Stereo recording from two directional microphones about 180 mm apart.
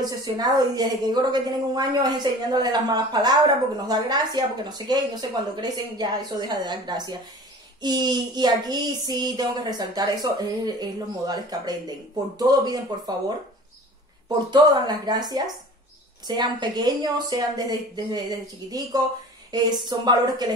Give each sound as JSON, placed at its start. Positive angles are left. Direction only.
{"t": 0.0, "sound": "speech", "side_deg": -20}
{"t": 14.5, "sound": "speech", "side_deg": -25}